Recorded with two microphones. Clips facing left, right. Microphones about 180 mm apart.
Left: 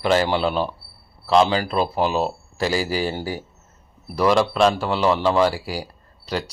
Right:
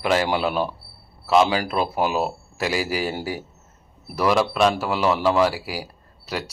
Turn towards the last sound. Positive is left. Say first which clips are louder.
# left 3 dB
turn(degrees=-5)  # may be behind; listen again after turning